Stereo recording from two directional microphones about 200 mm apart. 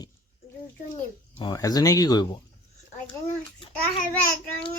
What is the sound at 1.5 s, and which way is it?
Speech, 15° left (ahead or behind).